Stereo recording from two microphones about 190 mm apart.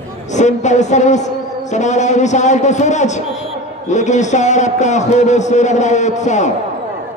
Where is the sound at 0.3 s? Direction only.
40° left (ahead or behind).